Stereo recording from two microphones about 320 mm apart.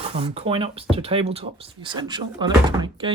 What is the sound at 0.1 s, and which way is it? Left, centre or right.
Speech, centre.